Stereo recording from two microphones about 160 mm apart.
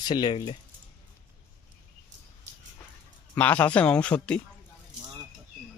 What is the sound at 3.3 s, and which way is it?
Speech, 10° left (ahead or behind).